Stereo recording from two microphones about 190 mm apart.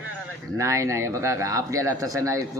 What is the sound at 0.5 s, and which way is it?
Speech, 15° right (ahead or behind).